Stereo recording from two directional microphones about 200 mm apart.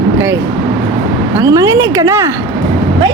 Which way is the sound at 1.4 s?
15° right (ahead or behind).